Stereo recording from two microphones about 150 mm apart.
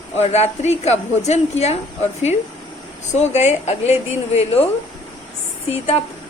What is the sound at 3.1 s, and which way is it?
A woman's voice, 50° left (ahead or behind).